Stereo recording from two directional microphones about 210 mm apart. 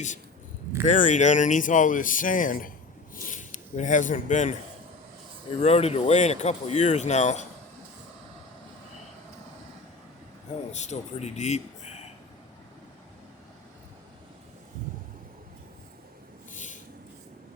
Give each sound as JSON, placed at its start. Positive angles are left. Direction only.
{"t": 0.9, "sound": "speech", "side_deg": 35}
{"t": 5.5, "sound": "speech", "side_deg": 30}
{"t": 10.7, "sound": "speech", "side_deg": 35}